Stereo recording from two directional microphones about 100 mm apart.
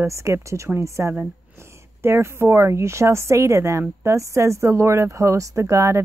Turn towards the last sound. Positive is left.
turn(degrees=-30)  # may be behind; listen again after turning